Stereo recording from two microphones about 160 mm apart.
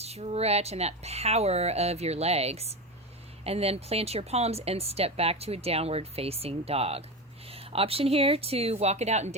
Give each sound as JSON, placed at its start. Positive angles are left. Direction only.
{"t": 0.0, "sound": "speech", "side_deg": -40}